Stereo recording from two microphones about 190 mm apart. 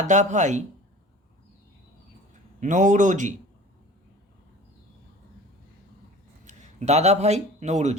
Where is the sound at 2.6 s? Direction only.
40° right (ahead or behind).